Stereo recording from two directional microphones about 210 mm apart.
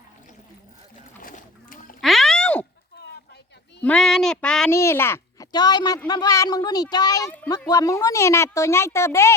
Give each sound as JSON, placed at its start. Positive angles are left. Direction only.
{"t": 1.2, "sound": "duck", "side_deg": 40}
{"t": 2.0, "sound": "a sound", "side_deg": 0}
{"t": 3.8, "sound": "speech", "side_deg": 5}